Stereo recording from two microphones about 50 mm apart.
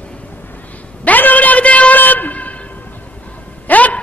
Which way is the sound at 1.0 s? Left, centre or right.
Left.